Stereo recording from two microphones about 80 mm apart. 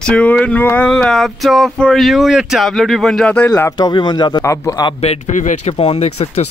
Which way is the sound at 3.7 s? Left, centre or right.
Left.